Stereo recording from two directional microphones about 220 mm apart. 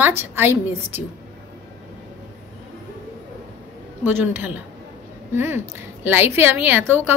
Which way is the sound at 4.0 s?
10° right (ahead or behind).